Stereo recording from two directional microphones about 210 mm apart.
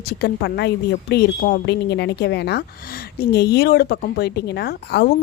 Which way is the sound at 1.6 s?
55° left (ahead or behind).